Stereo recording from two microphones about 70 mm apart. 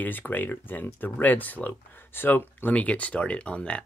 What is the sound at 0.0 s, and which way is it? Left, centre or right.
Speech, left.